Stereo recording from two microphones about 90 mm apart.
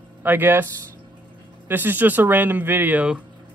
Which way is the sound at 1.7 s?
20° right (ahead or behind).